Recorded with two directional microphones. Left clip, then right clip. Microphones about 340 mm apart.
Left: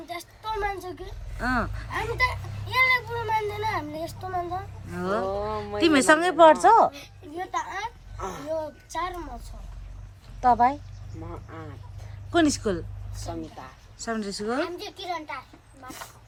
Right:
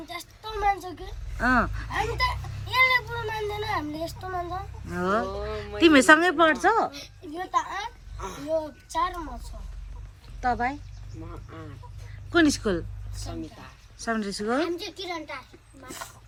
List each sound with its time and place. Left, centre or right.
0.1 s speech: centre
5.3 s speech: left
5.8 s speech: centre
7.3 s a child's voice: centre
8.2 s speech: left
8.4 s a child's voice: centre
10.4 s speech: centre
12.3 s a child's voice: centre